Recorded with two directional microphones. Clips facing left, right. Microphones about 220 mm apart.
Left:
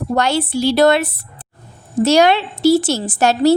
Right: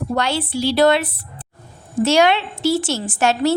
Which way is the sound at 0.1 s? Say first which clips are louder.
Left 5 dB; 45° left (ahead or behind).